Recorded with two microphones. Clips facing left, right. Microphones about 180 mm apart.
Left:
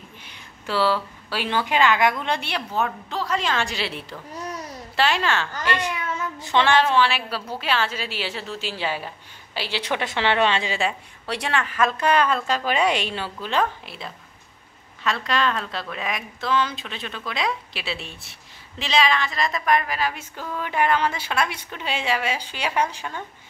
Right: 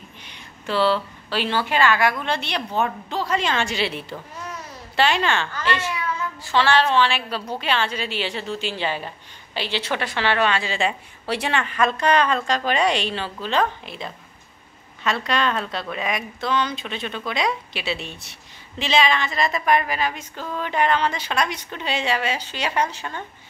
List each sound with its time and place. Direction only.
0.7 s a woman's voice: 10° left (ahead or behind)
5.5 s a woman's voice: 15° left (ahead or behind)
10.7 s a woman's voice: centre (ahead or behind)